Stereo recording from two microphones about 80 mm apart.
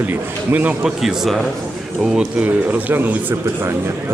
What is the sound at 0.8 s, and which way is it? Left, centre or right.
Speech, centre.